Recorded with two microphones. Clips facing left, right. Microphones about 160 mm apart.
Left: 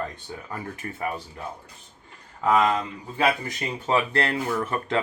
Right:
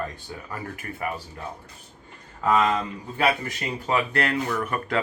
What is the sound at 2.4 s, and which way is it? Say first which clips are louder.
Speech: left 1 dB; 15° left (ahead or behind).